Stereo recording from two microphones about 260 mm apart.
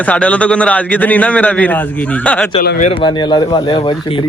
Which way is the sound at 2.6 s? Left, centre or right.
Left.